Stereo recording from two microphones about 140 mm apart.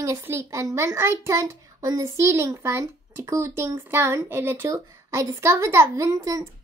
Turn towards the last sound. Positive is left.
turn(degrees=-25)  # may be behind; listen again after turning